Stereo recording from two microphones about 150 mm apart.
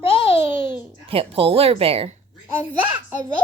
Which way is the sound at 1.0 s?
40° right (ahead or behind).